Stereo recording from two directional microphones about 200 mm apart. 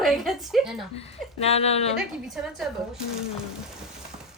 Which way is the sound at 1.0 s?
30° left (ahead or behind).